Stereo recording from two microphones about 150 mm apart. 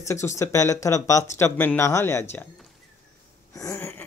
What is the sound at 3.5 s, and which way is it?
Speech, 20° left (ahead or behind).